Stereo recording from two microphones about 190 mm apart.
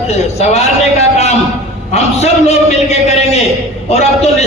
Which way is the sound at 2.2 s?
35° left (ahead or behind).